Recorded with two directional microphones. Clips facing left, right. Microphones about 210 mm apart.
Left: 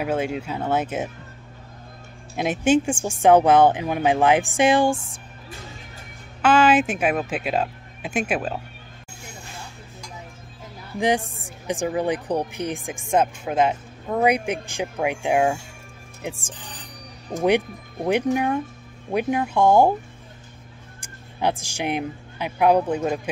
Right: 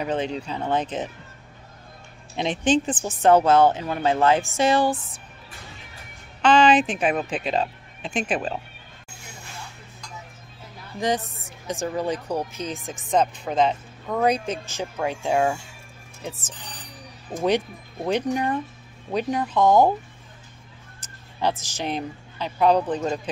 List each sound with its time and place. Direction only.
0.0 s speech: 5° left (ahead or behind)
2.3 s speech: 5° left (ahead or behind)
6.4 s speech: 5° left (ahead or behind)
11.0 s speech: 15° left (ahead or behind)
11.2 s a woman's voice: 30° left (ahead or behind)
11.6 s speech: 15° left (ahead or behind)
18.0 s speech: 10° left (ahead or behind)
21.0 s speech: 10° left (ahead or behind)